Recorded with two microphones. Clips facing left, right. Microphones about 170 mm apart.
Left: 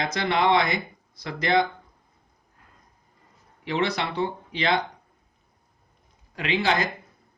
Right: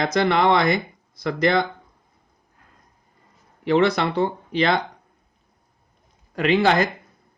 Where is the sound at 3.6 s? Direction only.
50° right (ahead or behind).